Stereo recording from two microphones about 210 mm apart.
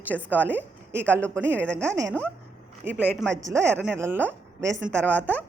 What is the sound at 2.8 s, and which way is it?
A man's voice, 10° right (ahead or behind).